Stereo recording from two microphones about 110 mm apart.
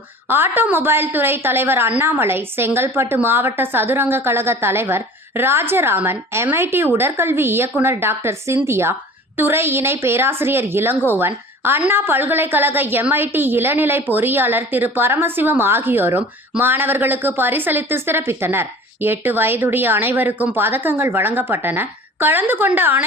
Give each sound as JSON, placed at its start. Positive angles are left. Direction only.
{"t": 0.3, "sound": "a woman's voice", "side_deg": -20}